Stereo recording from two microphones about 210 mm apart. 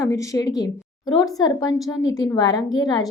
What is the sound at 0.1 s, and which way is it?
A woman's voice, 15° left (ahead or behind).